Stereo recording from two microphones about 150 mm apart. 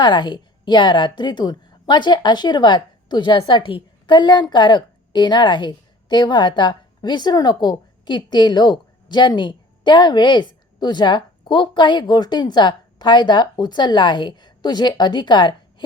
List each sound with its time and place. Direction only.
0.0 s a woman's voice: 30° left (ahead or behind)